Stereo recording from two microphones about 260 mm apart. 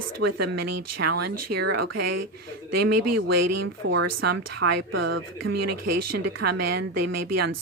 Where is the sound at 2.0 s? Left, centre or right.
Right.